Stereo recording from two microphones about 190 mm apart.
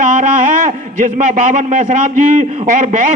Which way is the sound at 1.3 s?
45° right (ahead or behind).